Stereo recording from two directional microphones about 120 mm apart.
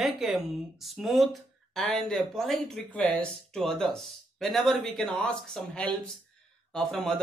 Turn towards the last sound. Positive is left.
turn(degrees=5)  # may be behind; listen again after turning